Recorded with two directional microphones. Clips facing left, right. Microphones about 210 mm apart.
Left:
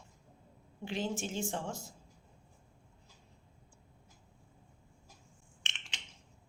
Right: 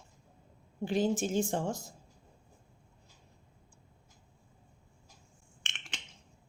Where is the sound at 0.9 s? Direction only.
40° right (ahead or behind).